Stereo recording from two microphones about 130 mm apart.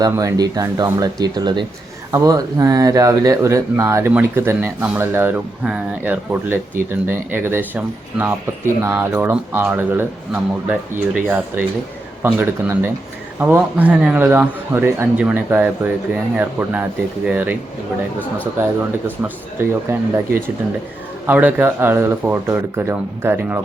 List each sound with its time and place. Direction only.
0.0 s speech: 30° right (ahead or behind); by 17.6 s 15° right (ahead or behind)
19.5 s speech: 15° right (ahead or behind)
21.2 s speech: 15° right (ahead or behind)